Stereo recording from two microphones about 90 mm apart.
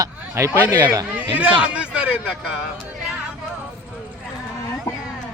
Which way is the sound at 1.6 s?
10° right (ahead or behind).